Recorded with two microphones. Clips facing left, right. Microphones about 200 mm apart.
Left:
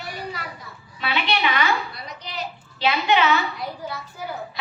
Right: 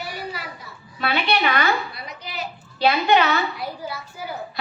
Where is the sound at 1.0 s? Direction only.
45° right (ahead or behind).